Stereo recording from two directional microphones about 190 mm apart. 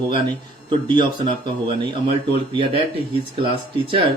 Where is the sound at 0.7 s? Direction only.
25° right (ahead or behind).